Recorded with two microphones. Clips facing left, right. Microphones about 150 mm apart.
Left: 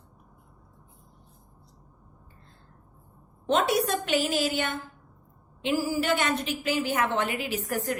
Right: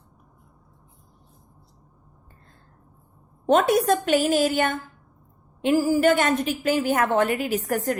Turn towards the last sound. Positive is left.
turn(degrees=-50)  # may be behind; listen again after turning